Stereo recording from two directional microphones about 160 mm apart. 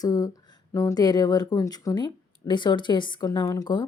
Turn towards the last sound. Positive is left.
turn(degrees=25)  # may be behind; listen again after turning